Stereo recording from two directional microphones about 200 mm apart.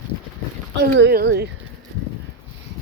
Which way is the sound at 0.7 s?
55° right (ahead or behind).